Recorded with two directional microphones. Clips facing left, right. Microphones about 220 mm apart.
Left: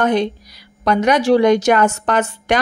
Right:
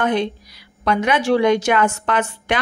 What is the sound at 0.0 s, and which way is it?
A woman's voice, 40° left (ahead or behind).